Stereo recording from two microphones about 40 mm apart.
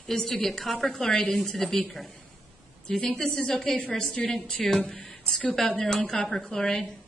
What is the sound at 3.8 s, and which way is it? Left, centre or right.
Speech, left.